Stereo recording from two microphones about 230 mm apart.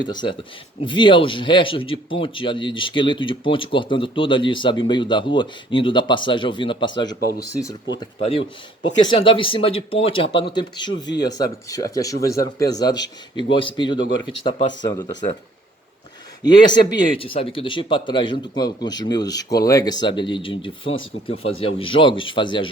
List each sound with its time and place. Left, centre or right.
0.1 s speech: centre
16.4 s speech: centre